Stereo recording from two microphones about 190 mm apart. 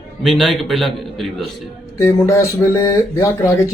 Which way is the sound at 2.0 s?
15° left (ahead or behind).